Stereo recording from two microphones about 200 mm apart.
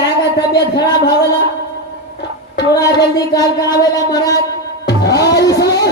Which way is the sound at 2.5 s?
20° left (ahead or behind).